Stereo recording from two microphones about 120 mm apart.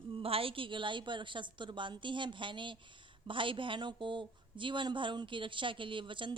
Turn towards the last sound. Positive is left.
turn(degrees=-45)  # may be behind; listen again after turning